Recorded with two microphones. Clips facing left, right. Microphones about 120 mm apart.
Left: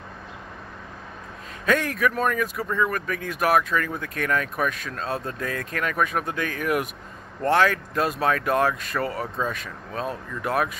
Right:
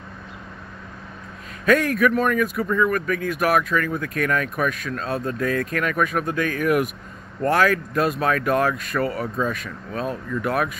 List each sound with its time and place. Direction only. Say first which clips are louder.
1.7 s speech: right 5 dB; 30° left (ahead or behind)